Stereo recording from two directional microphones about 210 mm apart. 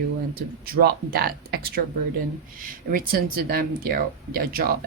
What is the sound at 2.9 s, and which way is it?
Speech, 45° right (ahead or behind).